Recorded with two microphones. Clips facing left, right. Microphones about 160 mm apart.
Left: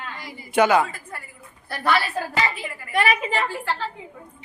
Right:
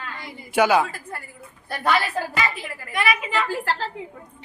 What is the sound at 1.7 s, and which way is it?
Speech, 15° right (ahead or behind).